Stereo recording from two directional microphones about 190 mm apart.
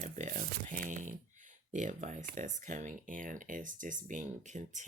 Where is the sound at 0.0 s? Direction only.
40° right (ahead or behind).